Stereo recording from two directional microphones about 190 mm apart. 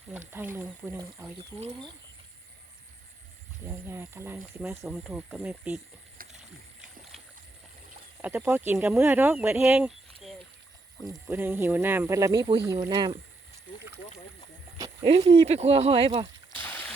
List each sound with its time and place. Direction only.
0.1 s speech: 10° right (ahead or behind)
3.7 s speech: 15° right (ahead or behind)
6.2 s rowboat: 50° right (ahead or behind)
7.1 s boat: centre (ahead or behind)
8.2 s speech: 10° right (ahead or behind)
11.3 s speech: 10° right (ahead or behind)
15.1 s speech: 30° right (ahead or behind)
16.6 s a sound: 10° left (ahead or behind)